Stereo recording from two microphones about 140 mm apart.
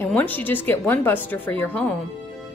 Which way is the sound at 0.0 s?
10° left (ahead or behind).